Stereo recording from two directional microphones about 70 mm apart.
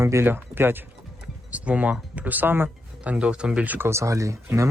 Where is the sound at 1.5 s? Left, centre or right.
Centre.